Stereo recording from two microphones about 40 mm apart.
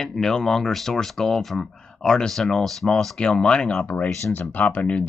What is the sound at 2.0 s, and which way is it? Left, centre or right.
Speech, centre.